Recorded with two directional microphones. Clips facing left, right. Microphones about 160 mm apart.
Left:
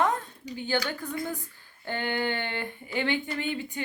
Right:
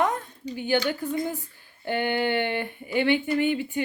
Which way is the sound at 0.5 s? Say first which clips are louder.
Right 5 dB; 15° right (ahead or behind).